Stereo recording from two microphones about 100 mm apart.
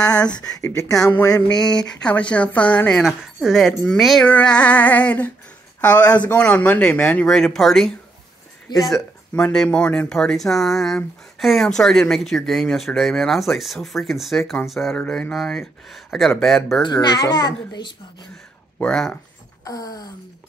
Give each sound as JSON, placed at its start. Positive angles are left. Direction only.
{"t": 0.0, "sound": "speech", "side_deg": 40}
{"t": 1.5, "sound": "speech", "side_deg": 5}
{"t": 3.0, "sound": "speech", "side_deg": 0}
{"t": 8.7, "sound": "a child's voice", "side_deg": 45}
{"t": 9.3, "sound": "speech", "side_deg": 5}
{"t": 15.0, "sound": "speech", "side_deg": 10}
{"t": 16.8, "sound": "a child's voice", "side_deg": 45}
{"t": 18.8, "sound": "speech", "side_deg": 10}
{"t": 19.6, "sound": "a sound", "side_deg": 40}